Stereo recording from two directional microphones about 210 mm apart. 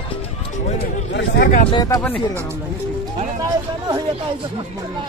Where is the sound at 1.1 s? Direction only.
55° left (ahead or behind).